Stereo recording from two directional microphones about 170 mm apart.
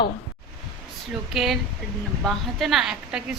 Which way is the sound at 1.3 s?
Centre (ahead or behind).